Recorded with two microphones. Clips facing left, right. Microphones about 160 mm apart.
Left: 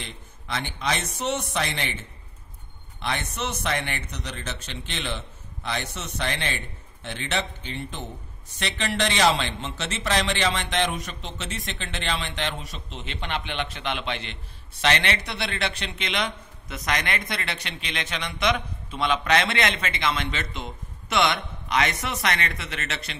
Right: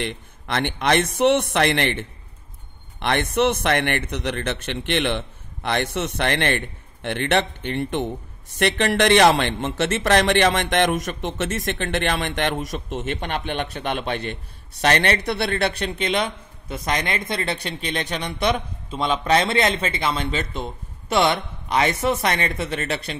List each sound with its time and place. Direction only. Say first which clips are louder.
0.0 s a man's voice: right 12 dB; 65° right (ahead or behind)
16.3 s speech: right 3 dB; 30° right (ahead or behind)